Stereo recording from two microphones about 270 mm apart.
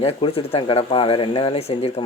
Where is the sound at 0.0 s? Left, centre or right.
Left.